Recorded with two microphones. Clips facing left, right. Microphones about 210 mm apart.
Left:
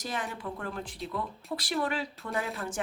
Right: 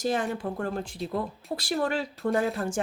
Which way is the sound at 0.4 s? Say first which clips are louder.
Right 6 dB; 45° right (ahead or behind).